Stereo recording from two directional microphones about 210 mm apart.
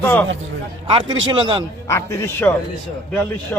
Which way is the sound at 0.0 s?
10° left (ahead or behind).